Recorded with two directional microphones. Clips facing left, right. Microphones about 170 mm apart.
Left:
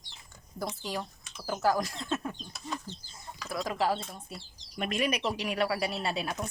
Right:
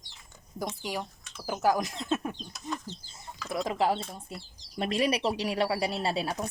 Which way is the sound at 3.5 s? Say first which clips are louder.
Right 2 dB; 25° right (ahead or behind).